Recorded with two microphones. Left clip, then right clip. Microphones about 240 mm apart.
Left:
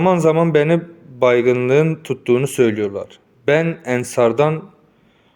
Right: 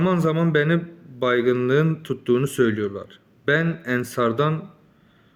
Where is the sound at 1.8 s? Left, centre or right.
Left.